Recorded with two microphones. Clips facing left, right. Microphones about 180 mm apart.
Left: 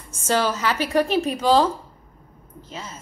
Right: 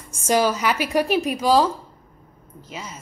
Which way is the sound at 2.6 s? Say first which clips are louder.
Right 1 dB; 10° right (ahead or behind).